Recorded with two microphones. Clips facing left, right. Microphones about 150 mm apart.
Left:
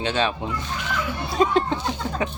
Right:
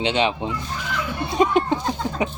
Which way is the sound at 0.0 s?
20° right (ahead or behind).